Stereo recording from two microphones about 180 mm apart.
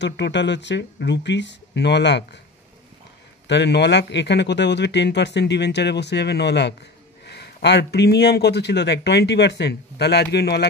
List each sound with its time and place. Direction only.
0.0 s speech: 75° left (ahead or behind)
3.4 s speech: 75° left (ahead or behind)